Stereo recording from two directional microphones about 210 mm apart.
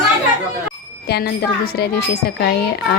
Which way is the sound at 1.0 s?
50° left (ahead or behind).